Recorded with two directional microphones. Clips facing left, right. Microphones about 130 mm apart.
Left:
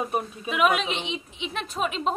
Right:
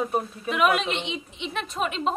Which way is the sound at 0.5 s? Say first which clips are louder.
Even; centre (ahead or behind).